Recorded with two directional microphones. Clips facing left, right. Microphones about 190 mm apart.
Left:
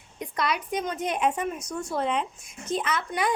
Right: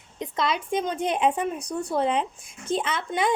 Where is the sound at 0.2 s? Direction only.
25° right (ahead or behind).